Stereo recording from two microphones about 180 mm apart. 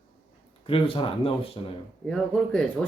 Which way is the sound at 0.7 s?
30° left (ahead or behind).